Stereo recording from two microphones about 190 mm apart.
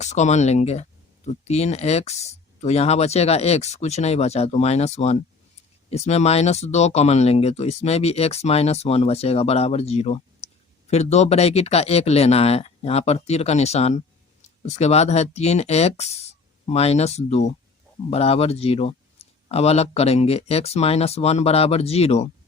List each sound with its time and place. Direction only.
0.0 s speech: 35° left (ahead or behind)